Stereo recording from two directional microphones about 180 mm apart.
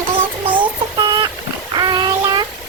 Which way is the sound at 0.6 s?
25° right (ahead or behind).